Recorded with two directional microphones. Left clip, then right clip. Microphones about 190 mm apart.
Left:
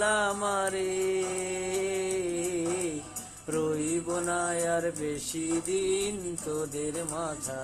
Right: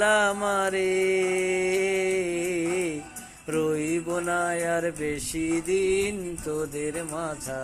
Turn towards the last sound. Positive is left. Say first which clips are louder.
# right 3 dB
turn(degrees=-20)  # may be behind; listen again after turning